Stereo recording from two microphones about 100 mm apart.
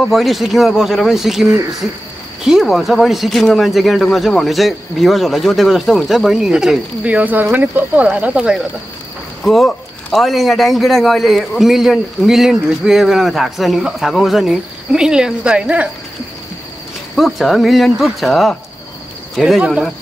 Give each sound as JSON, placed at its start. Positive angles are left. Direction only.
{"t": 0.1, "sound": "a man's voice", "side_deg": 0}
{"t": 7.2, "sound": "speech", "side_deg": -15}
{"t": 9.4, "sound": "a man's voice", "side_deg": 0}
{"t": 17.1, "sound": "a man's voice", "side_deg": 0}